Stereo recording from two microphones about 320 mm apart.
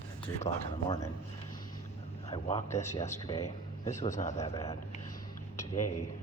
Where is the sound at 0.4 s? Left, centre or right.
Centre.